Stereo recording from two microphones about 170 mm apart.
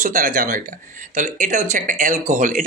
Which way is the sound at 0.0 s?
50° right (ahead or behind).